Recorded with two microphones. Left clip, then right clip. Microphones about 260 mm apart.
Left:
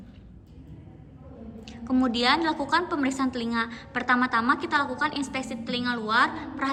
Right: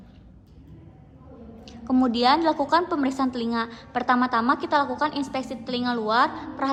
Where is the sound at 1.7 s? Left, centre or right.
Centre.